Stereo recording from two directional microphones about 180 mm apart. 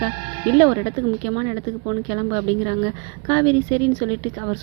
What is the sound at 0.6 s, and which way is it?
A woman's voice, 25° right (ahead or behind).